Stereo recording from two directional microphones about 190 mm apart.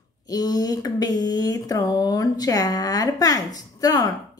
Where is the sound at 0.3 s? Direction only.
20° left (ahead or behind).